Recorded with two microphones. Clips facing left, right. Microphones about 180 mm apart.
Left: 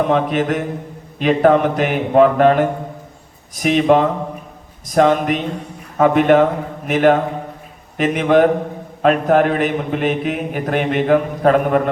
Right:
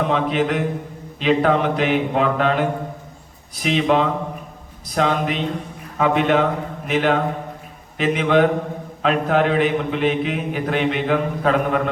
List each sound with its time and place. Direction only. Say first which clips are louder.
0.0 s a man's voice: left 3 dB; 50° left (ahead or behind)